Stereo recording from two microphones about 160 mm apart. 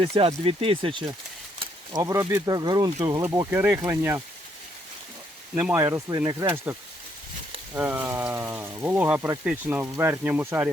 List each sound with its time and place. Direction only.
0.0 s speech: 35° right (ahead or behind)
2.0 s speech: 20° right (ahead or behind)
5.5 s speech: 15° right (ahead or behind)
7.7 s speech: 10° right (ahead or behind)